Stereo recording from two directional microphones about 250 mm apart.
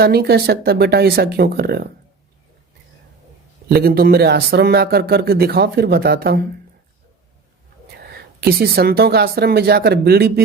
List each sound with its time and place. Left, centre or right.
0.0 s speech: right
3.7 s speech: right
8.1 s speech: right